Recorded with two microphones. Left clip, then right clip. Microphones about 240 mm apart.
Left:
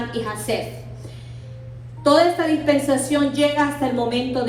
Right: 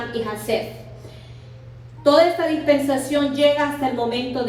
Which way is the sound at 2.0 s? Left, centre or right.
Left.